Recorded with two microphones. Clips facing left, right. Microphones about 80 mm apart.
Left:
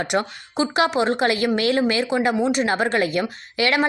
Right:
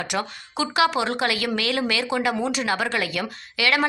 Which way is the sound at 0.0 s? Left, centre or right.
Left.